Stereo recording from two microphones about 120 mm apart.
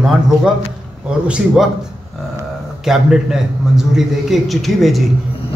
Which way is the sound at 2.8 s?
5° right (ahead or behind).